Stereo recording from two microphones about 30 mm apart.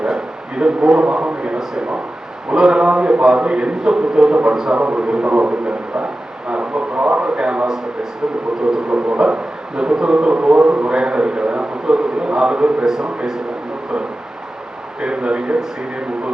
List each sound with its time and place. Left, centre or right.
0.0 s a sound: right
1.0 s a man's voice: right
2.5 s a man's voice: right
4.8 s a man's voice: right
6.5 s radio: right
7.2 s a man's voice: right
9.0 s a man's voice: right
12.8 s a man's voice: centre
15.0 s a man's voice: right